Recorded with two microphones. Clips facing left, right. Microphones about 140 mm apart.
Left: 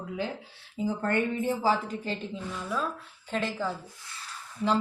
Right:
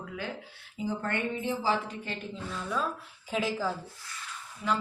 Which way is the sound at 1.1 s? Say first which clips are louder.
Left 4 dB; 45° left (ahead or behind).